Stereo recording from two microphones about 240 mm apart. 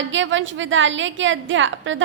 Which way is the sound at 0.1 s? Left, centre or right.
Right.